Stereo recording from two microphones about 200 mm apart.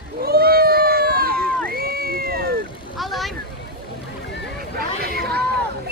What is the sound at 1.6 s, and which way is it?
Crowd, 50° right (ahead or behind).